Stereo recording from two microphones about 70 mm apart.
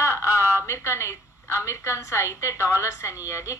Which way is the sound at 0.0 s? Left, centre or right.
Left.